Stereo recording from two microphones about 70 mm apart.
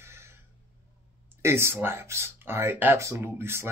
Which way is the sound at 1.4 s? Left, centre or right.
Right.